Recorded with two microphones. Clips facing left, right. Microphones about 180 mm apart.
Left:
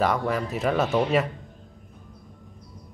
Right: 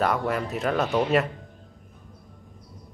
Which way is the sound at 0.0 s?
Centre (ahead or behind).